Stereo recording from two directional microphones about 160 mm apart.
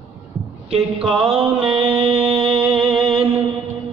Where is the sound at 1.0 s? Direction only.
35° right (ahead or behind).